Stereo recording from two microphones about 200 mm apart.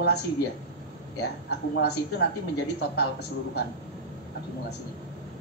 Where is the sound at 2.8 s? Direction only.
55° left (ahead or behind).